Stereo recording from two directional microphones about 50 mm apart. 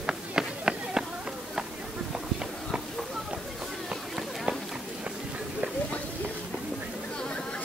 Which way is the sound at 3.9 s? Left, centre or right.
Centre.